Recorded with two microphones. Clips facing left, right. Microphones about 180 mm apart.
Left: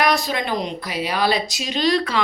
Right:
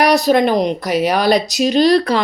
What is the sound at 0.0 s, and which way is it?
Speech, 70° right (ahead or behind).